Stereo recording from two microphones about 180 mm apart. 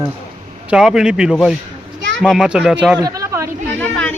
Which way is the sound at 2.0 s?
90° right.